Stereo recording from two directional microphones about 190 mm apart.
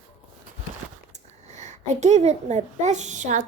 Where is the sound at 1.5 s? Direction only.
40° right (ahead or behind).